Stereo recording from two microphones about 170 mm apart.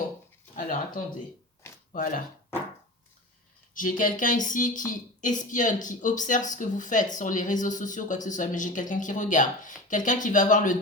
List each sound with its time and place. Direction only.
1.9 s speech: 55° left (ahead or behind)
3.8 s speech: 50° left (ahead or behind)